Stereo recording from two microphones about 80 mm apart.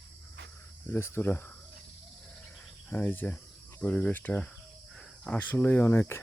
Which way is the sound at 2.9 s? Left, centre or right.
Left.